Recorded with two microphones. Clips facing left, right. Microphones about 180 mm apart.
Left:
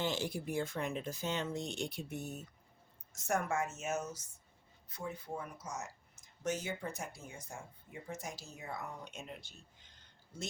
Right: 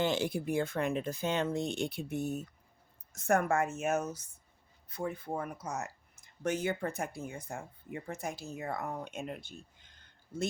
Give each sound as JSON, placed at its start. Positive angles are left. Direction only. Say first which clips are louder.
{"t": 0.0, "sound": "speech", "louder": "right 6 dB", "side_deg": -60}